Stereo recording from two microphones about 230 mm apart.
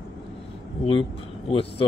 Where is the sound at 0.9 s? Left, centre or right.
Left.